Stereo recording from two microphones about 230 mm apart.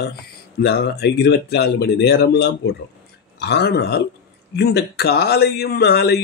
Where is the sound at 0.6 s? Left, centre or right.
Left.